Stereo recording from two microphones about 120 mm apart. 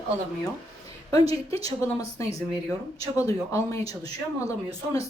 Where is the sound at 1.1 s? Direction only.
30° left (ahead or behind).